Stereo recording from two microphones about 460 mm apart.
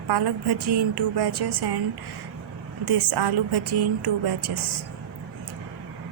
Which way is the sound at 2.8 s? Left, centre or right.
Right.